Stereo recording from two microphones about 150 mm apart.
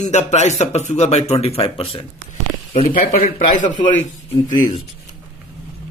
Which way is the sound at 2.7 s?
65° left (ahead or behind).